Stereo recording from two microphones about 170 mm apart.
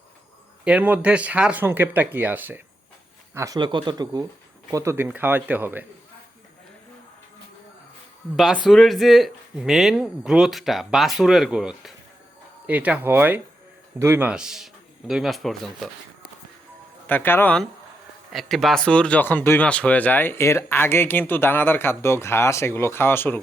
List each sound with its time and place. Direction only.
0.6 s speech: 10° right (ahead or behind)
8.4 s speech: centre (ahead or behind)
17.1 s speech: 10° left (ahead or behind)